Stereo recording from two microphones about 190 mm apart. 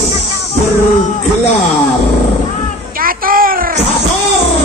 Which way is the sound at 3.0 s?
50° right (ahead or behind).